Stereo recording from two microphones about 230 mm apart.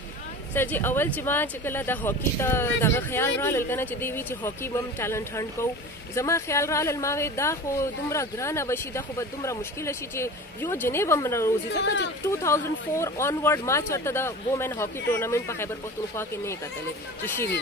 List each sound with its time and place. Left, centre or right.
0.6 s speech: centre
11.7 s speech: left
12.3 s speech: centre